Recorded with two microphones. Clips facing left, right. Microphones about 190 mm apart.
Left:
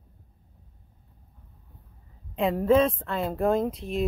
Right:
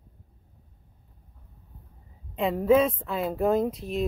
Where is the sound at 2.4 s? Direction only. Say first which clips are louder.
Even; centre (ahead or behind).